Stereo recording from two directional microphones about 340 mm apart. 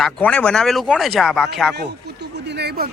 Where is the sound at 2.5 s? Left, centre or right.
Right.